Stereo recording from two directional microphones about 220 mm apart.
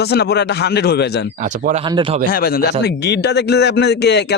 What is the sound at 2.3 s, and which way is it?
A man's voice, 45° left (ahead or behind).